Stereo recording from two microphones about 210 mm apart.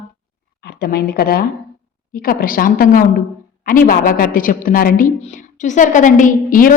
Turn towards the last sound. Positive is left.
turn(degrees=40)  # may be behind; listen again after turning